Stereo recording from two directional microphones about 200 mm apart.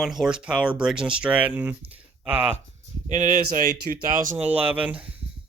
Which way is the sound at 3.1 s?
40° right (ahead or behind).